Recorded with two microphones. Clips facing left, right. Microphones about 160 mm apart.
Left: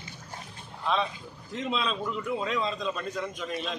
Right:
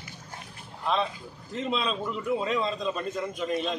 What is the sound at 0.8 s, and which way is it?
A man's voice, centre (ahead or behind).